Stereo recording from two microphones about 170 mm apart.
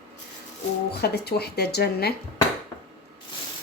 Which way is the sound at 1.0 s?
70° left (ahead or behind).